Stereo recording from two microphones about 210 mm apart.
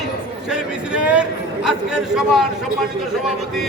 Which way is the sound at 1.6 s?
5° right (ahead or behind).